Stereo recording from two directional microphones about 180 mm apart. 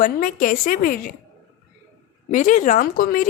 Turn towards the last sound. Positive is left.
turn(degrees=50)  # may be behind; listen again after turning